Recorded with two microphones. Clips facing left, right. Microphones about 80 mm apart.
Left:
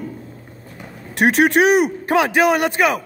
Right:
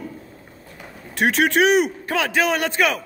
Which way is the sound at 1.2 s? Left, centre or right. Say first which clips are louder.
Left 3 dB; left.